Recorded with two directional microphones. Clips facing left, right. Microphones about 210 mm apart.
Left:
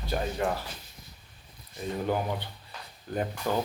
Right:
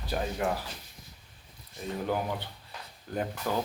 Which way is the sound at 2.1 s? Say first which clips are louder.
Left 1 dB; centre (ahead or behind).